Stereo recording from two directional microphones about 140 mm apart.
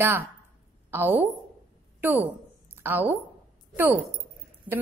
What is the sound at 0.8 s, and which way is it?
Speech, 15° right (ahead or behind).